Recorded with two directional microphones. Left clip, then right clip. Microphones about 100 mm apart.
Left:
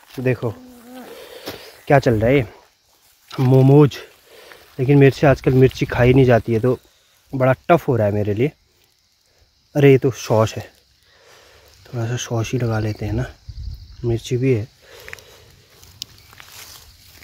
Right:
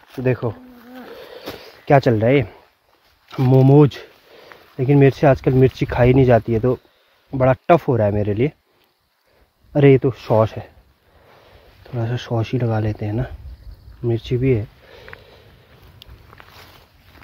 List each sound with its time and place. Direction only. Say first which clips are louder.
0.2 s speech: right 1 dB; 15° left (ahead or behind)
0.5 s bee: even; 20° left (ahead or behind)
0.8 s a sound: even; 25° left (ahead or behind)
1.4 s a sound: even; 10° left (ahead or behind)
3.3 s speech: even; 5° left (ahead or behind)
4.4 s speech: even; 20° left (ahead or behind)
7.4 s speech: right 1 dB; centre (ahead or behind)
9.7 s speech: even; 10° left (ahead or behind)
10.3 s speech: right 1 dB; 30° left (ahead or behind)
11.8 s speech: even; centre (ahead or behind)
16.3 s a sound: left 1 dB; 25° left (ahead or behind)